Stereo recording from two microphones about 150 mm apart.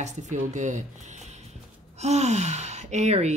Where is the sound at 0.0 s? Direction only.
55° right (ahead or behind).